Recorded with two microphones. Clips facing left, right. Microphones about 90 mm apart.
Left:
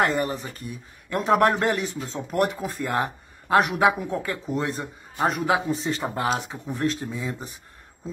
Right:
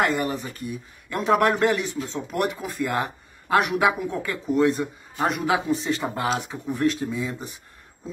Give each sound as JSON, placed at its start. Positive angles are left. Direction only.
{"t": 0.0, "sound": "a man's voice", "side_deg": 35}